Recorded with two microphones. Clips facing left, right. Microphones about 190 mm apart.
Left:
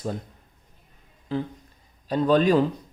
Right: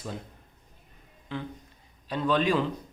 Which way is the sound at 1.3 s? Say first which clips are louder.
Left 7 dB; 35° left (ahead or behind).